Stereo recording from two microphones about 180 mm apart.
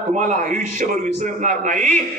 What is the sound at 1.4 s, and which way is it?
Speech, 45° right (ahead or behind).